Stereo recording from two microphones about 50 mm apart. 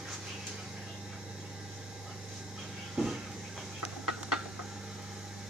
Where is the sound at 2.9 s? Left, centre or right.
Centre.